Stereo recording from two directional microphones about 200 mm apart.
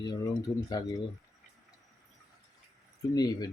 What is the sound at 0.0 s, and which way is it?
Speech, 20° left (ahead or behind).